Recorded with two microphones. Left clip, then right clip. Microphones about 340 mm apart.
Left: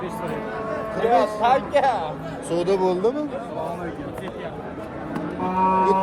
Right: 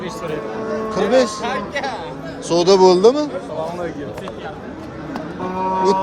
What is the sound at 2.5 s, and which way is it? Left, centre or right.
Speech, centre.